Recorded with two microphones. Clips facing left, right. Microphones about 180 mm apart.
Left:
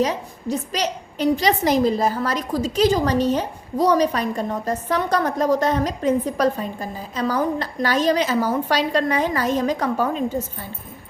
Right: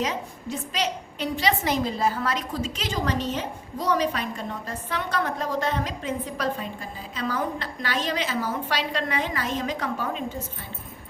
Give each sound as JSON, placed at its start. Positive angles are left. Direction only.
{"t": 0.0, "sound": "a woman's voice", "side_deg": 40}